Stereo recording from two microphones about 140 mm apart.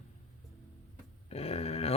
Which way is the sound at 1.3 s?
45° left (ahead or behind).